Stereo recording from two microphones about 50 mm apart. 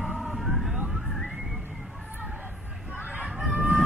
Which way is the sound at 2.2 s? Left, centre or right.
Right.